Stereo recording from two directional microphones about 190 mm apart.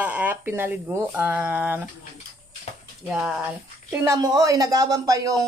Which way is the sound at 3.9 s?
15° right (ahead or behind).